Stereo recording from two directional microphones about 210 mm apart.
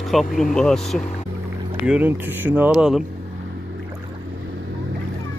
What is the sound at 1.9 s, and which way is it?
Speech, 10° right (ahead or behind).